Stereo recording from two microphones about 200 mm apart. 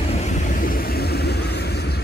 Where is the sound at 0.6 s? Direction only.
50° left (ahead or behind).